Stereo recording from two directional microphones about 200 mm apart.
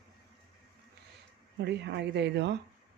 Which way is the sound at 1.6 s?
55° right (ahead or behind).